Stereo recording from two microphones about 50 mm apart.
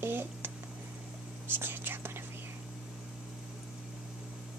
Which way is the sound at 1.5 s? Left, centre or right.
Right.